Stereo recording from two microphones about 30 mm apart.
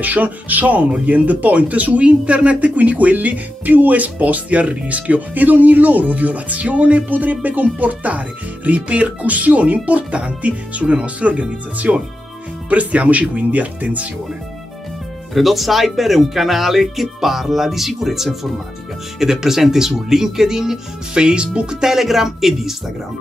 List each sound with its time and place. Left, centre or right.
0.0 s speech: right
15.3 s speech: centre
21.1 s speech: right
21.9 s speech: centre